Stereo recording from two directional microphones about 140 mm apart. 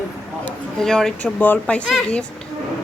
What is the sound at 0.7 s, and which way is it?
Speech, 5° left (ahead or behind).